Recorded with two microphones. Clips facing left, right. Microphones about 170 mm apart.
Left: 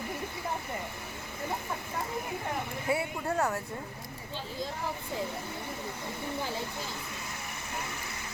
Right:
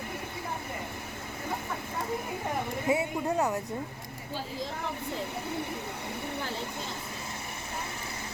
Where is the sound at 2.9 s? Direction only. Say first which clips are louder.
Right 2 dB; 20° right (ahead or behind).